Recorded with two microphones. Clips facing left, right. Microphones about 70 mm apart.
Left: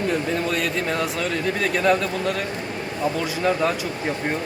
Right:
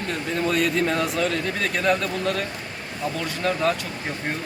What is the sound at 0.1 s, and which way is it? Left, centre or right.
Speech, centre.